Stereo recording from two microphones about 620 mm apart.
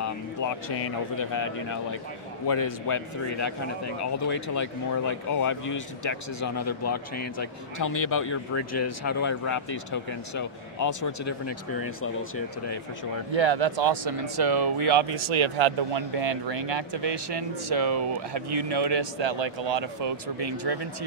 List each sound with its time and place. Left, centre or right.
0.0 s a man's voice: left
13.3 s speech: right